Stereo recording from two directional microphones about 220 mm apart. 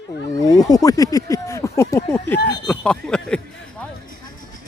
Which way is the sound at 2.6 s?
5° left (ahead or behind).